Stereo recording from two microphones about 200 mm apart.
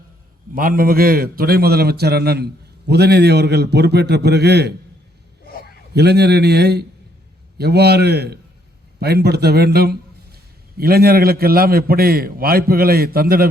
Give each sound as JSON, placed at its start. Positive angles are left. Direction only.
{"t": 0.5, "sound": "a man's voice", "side_deg": -45}
{"t": 5.5, "sound": "a sound", "side_deg": 50}
{"t": 5.9, "sound": "a man's voice", "side_deg": -55}